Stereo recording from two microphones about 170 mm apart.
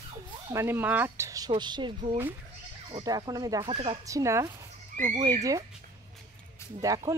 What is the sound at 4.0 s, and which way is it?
Speech, 20° right (ahead or behind).